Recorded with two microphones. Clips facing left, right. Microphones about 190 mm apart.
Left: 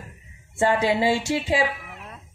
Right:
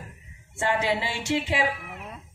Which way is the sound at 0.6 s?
35° left (ahead or behind).